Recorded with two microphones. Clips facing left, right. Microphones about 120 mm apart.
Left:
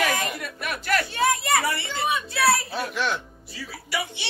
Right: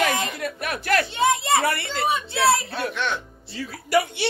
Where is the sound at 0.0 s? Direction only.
25° right (ahead or behind).